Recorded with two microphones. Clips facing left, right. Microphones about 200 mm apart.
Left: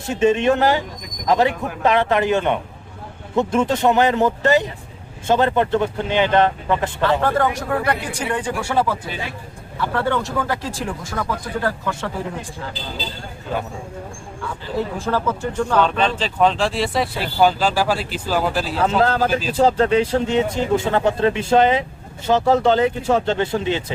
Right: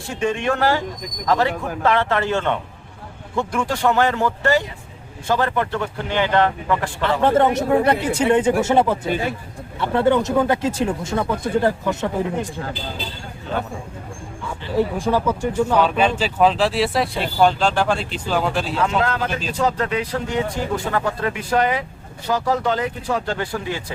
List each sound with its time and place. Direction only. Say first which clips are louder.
0.1 s speech: left 5 dB; 20° left (ahead or behind)
7.0 s speech: right 3 dB; 20° right (ahead or behind)
14.8 s speech: right 3 dB; 15° right (ahead or behind); by 18.8 s centre (ahead or behind)
18.8 s speech: left 5 dB; 35° left (ahead or behind)